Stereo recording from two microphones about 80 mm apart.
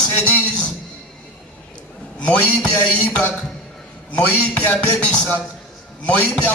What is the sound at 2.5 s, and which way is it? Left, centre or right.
Speech, centre.